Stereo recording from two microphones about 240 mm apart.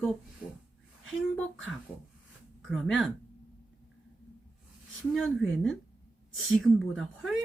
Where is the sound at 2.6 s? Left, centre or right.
Centre.